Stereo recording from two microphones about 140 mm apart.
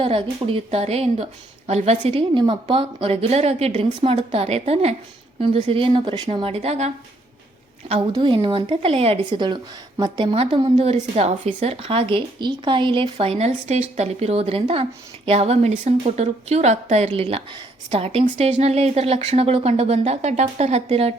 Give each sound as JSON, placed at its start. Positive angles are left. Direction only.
{"t": 0.0, "sound": "a woman's voice", "side_deg": -40}
{"t": 7.9, "sound": "a woman's voice", "side_deg": -40}